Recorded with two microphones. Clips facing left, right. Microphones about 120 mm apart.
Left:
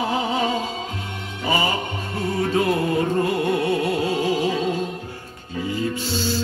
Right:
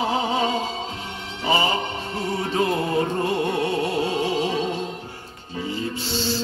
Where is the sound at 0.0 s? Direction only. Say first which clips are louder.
Even; 25° right (ahead or behind).